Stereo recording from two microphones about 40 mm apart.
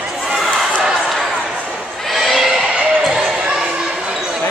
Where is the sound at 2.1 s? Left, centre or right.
Centre.